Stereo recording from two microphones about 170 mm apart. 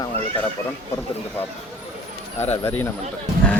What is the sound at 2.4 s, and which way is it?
Speech, 15° left (ahead or behind).